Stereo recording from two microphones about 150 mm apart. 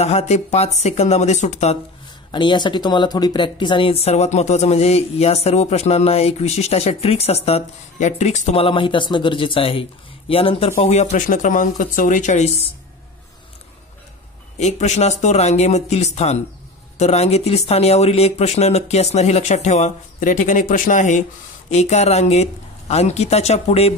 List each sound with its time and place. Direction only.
0.0 s speech: 45° left (ahead or behind)
2.3 s speech: 30° left (ahead or behind); by 12.6 s 50° left (ahead or behind)
14.6 s speech: 50° left (ahead or behind)